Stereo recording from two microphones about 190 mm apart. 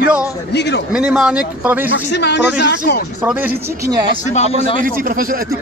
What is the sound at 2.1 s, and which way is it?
Speech, 65° left (ahead or behind).